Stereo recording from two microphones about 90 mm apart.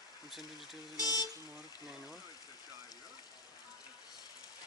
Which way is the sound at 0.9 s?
45° left (ahead or behind).